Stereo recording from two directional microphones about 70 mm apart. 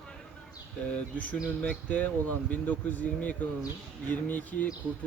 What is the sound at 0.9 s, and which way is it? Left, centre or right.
Speech, left.